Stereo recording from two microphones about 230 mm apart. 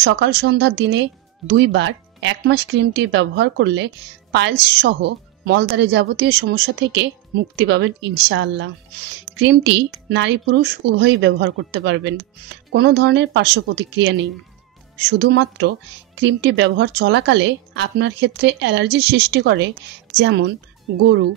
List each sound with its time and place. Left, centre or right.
0.0 s speech: right